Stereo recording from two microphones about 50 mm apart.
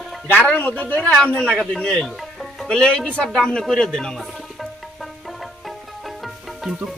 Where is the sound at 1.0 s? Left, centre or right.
Left.